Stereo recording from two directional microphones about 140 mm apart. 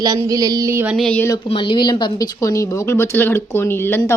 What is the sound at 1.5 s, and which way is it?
A woman's voice, 40° left (ahead or behind).